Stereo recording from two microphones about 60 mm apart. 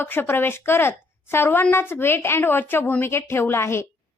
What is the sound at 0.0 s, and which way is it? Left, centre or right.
A woman's voice, left.